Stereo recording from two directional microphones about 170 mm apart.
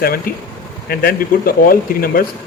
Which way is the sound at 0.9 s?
60° left (ahead or behind).